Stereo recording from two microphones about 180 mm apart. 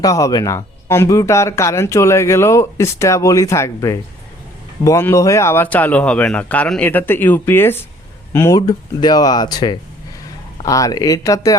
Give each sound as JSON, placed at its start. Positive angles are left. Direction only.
{"t": 0.0, "sound": "speech", "side_deg": 20}